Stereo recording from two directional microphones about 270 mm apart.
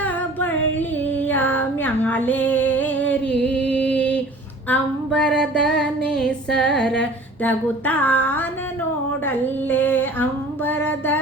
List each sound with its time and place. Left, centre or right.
0.0 s female singing: centre
4.7 s music: centre
6.7 s a sound: centre
9.2 s female singing: centre